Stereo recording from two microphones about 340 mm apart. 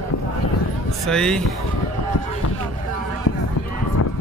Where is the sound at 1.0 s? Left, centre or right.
Centre.